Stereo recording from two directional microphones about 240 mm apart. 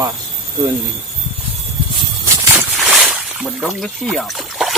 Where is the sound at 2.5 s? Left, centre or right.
Centre.